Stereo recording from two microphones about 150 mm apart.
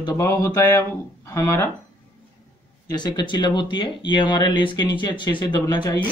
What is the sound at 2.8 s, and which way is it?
Speech, 30° left (ahead or behind).